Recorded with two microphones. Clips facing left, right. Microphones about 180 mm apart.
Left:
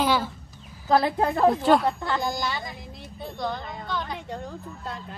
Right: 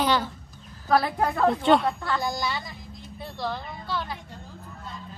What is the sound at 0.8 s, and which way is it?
Speech, 25° left (ahead or behind).